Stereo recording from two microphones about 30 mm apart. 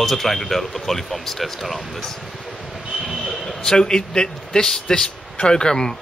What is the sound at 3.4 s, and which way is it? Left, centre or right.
A man's voice, centre.